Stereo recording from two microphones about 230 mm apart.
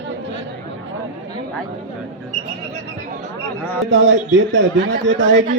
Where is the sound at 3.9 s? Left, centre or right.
Right.